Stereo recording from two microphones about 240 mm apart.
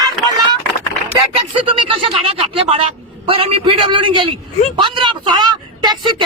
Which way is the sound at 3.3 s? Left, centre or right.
Right.